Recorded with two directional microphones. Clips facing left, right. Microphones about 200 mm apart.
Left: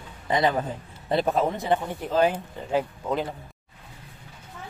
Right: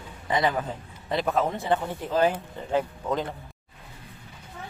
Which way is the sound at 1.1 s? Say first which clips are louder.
Left 3 dB; 30° left (ahead or behind).